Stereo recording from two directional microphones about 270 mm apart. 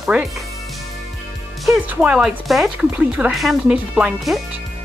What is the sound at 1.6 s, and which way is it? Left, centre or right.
Speech, centre.